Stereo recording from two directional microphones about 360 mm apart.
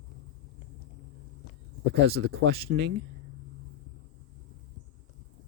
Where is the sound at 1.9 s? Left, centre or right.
Right.